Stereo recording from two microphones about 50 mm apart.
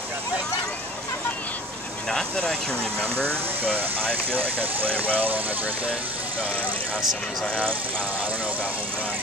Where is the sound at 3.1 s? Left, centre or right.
Right.